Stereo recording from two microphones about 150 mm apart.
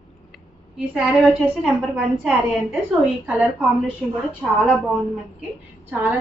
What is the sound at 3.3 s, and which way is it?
Speech, 10° right (ahead or behind).